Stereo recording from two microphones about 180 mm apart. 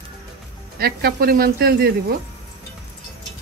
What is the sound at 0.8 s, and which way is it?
Speech, 60° right (ahead or behind).